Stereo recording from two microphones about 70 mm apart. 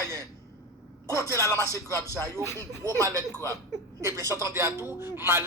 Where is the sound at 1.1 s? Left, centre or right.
Left.